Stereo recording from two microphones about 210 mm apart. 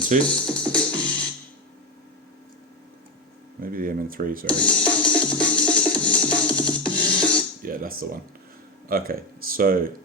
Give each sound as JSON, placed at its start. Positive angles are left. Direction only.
{"t": 0.2, "sound": "music", "side_deg": 5}
{"t": 3.6, "sound": "speech", "side_deg": -40}
{"t": 4.4, "sound": "music", "side_deg": 5}
{"t": 7.6, "sound": "speech", "side_deg": -40}